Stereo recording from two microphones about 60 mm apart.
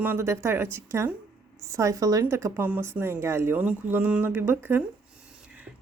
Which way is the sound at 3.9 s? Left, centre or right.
Right.